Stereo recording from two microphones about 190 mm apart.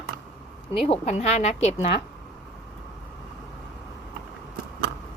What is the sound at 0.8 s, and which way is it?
A woman's voice, 35° left (ahead or behind).